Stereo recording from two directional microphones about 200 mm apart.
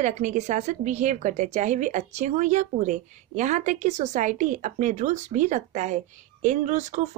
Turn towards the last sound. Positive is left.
turn(degrees=-35)  # may be behind; listen again after turning